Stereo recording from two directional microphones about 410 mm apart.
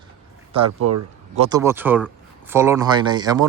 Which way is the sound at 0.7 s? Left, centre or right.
Right.